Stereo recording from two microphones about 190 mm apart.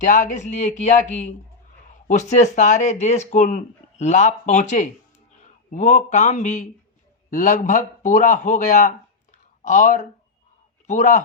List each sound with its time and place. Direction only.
0.0 s speech: 45° left (ahead or behind)